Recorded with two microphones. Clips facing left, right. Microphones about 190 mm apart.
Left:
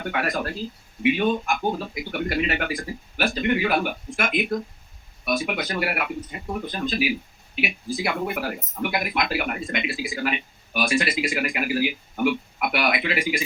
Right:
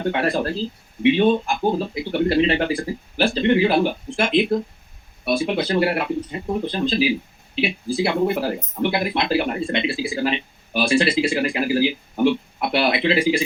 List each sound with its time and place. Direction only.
0.0 s speech: 30° right (ahead or behind)